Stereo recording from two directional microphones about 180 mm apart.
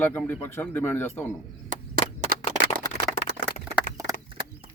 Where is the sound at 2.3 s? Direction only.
55° right (ahead or behind).